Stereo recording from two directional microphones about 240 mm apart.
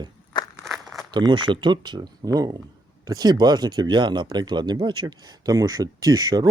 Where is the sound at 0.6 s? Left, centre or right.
Centre.